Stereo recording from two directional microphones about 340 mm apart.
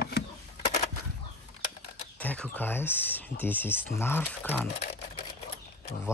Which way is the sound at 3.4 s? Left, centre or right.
Centre.